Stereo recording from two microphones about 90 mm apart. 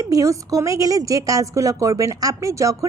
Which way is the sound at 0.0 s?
40° right (ahead or behind).